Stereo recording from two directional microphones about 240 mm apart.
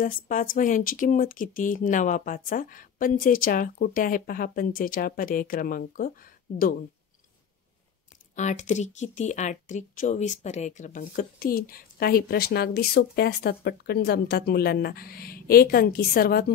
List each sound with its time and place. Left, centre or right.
0.0 s speech: left
8.4 s speech: left